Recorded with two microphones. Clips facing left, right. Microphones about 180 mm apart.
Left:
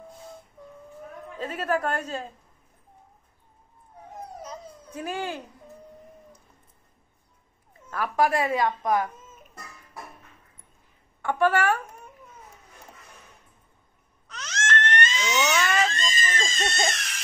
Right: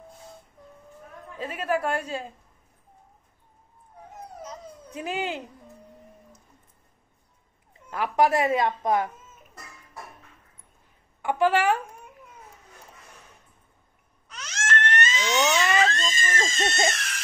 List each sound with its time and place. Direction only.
1.4 s a woman's voice: 10° right (ahead or behind)
4.9 s a woman's voice: 20° right (ahead or behind)
7.9 s a woman's voice: 20° right (ahead or behind)
11.2 s a woman's voice: 15° right (ahead or behind)
14.2 s baby cry: 10° right (ahead or behind)
16.1 s screaming: 25° right (ahead or behind)